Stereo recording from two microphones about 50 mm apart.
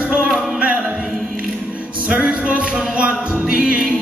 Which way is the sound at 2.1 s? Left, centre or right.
Right.